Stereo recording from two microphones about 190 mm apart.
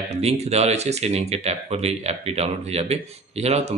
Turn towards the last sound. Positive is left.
turn(degrees=-35)  # may be behind; listen again after turning